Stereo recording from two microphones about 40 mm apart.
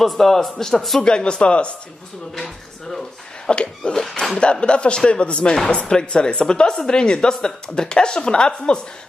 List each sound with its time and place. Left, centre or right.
0.0 s a man's voice: centre
1.0 s a woman's voice: left
2.3 s speech: centre
3.4 s a woman's voice: left
3.9 s a man's voice: centre
4.4 s a woman's voice: left